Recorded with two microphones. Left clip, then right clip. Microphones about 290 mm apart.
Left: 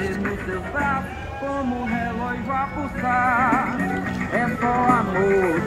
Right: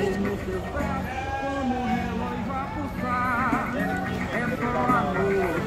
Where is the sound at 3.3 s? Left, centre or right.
Centre.